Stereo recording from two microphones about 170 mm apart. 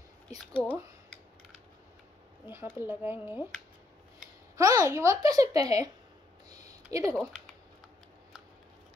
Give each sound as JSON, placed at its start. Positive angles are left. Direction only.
{"t": 2.4, "sound": "speech", "side_deg": -15}
{"t": 4.6, "sound": "a woman's voice", "side_deg": -20}
{"t": 6.5, "sound": "a sound", "side_deg": -20}